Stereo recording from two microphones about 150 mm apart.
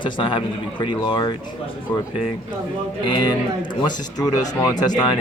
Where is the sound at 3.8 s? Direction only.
25° left (ahead or behind).